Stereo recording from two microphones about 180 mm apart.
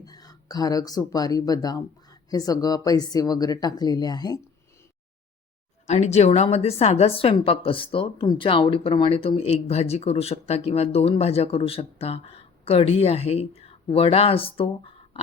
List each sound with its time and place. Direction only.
0.0 s speech: 20° left (ahead or behind)
5.8 s a woman's voice: 40° left (ahead or behind)